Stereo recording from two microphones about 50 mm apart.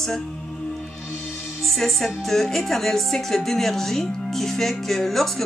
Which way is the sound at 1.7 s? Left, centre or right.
Centre.